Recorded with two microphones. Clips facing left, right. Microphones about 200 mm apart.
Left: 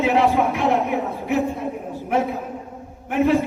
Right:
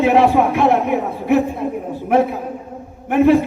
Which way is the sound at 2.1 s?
60° right (ahead or behind).